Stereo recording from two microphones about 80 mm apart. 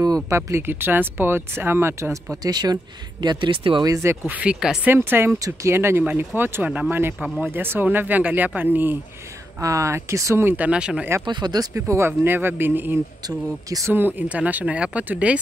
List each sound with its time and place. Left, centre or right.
0.0 s speech: right
0.4 s speech: right
2.4 s speech: right
3.8 s speech: right
4.4 s speech: centre
4.8 s speech: right
5.4 s speech: right
5.8 s speech: right
9.6 s speech: right
10.4 s speech: right
11.2 s speech: right
11.7 s speech: right
13.3 s speech: right
13.8 s speech: right